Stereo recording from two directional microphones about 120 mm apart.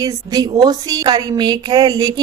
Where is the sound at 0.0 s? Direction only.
30° right (ahead or behind).